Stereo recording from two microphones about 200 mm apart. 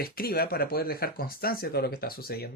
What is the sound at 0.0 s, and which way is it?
Speech, 50° left (ahead or behind).